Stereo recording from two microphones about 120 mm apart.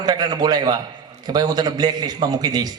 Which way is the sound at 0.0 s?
35° right (ahead or behind).